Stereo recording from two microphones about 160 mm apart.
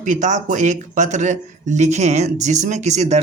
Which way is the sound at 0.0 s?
50° right (ahead or behind).